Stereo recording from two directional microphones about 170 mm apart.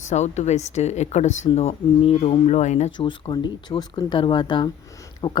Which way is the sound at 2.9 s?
30° left (ahead or behind).